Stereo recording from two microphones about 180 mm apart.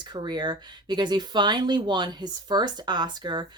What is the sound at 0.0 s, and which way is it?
Speech, 25° right (ahead or behind).